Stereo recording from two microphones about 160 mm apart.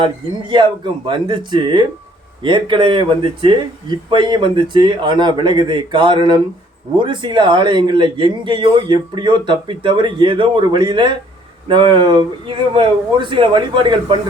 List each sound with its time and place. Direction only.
0.0 s a man's voice: 30° right (ahead or behind)